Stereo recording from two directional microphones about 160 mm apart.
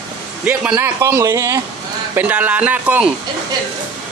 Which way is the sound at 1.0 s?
20° right (ahead or behind).